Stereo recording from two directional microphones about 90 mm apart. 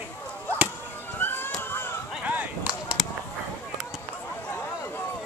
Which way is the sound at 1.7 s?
25° left (ahead or behind).